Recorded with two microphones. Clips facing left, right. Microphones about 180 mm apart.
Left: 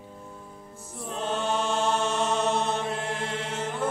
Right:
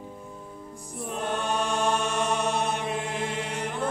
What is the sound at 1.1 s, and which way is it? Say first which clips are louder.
Chant: left 1 dB; 15° right (ahead or behind).